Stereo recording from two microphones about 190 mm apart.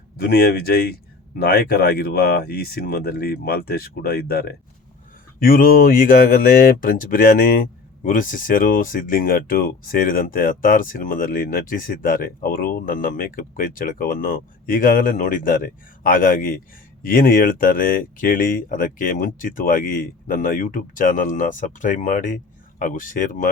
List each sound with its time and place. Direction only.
0.2 s speech: 55° left (ahead or behind)